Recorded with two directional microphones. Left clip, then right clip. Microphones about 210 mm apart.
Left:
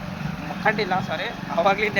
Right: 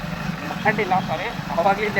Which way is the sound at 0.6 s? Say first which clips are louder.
Right 2 dB; 15° left (ahead or behind).